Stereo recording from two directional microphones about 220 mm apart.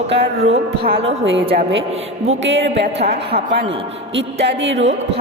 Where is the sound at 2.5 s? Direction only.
50° right (ahead or behind).